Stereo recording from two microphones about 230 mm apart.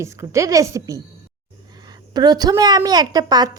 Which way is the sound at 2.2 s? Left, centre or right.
Centre.